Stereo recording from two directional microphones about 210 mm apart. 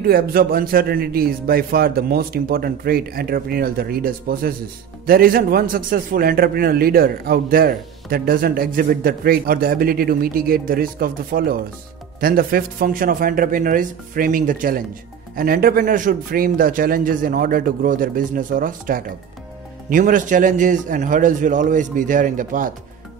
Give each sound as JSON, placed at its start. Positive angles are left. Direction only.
{"t": 0.0, "sound": "a man's voice", "side_deg": -45}